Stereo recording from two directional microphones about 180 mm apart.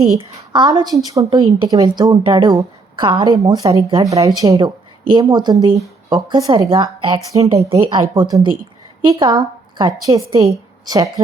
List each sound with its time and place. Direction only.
0.2 s a woman's voice: 25° right (ahead or behind)